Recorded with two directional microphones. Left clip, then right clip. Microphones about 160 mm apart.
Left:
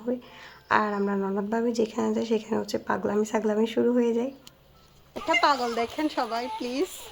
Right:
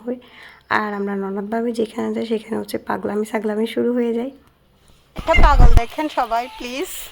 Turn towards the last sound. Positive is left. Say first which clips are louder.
# right 5 dB
turn(degrees=-15)  # may be behind; listen again after turning